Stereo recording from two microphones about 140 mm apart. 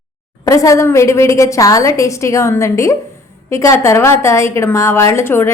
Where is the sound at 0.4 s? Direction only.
25° left (ahead or behind).